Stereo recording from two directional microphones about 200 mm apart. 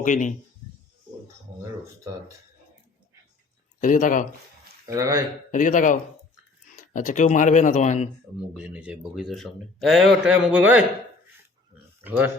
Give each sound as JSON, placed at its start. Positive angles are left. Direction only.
{"t": 0.0, "sound": "speech", "side_deg": 40}
{"t": 3.8, "sound": "speech", "side_deg": 40}
{"t": 4.9, "sound": "speech", "side_deg": -15}
{"t": 5.5, "sound": "speech", "side_deg": 40}
{"t": 8.5, "sound": "a man's voice", "side_deg": -5}
{"t": 12.0, "sound": "speech", "side_deg": -10}